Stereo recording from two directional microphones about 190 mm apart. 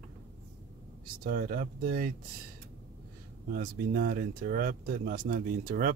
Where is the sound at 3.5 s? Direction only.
55° right (ahead or behind).